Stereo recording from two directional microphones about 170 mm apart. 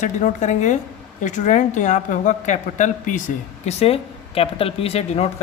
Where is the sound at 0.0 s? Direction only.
45° left (ahead or behind).